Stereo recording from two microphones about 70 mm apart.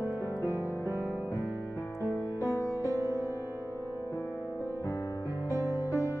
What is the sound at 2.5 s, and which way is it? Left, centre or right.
Music, left.